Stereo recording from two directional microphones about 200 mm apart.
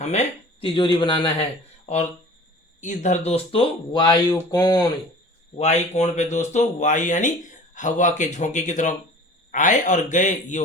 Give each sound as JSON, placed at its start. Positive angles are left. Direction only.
{"t": 0.0, "sound": "speech", "side_deg": 35}
{"t": 2.8, "sound": "speech", "side_deg": 35}
{"t": 5.5, "sound": "speech", "side_deg": 35}